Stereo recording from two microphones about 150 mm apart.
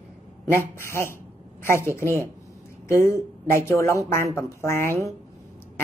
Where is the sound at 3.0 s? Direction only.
20° left (ahead or behind).